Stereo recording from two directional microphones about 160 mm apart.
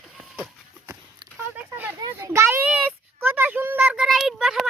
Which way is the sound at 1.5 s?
10° right (ahead or behind).